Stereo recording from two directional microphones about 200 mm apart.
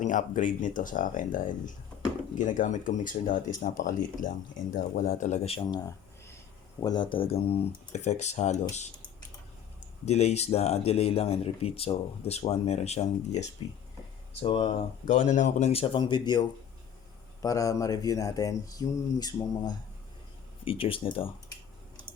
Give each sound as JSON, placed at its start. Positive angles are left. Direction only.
{"t": 0.0, "sound": "speech", "side_deg": 40}
{"t": 6.7, "sound": "speech", "side_deg": 20}
{"t": 10.1, "sound": "speech", "side_deg": 30}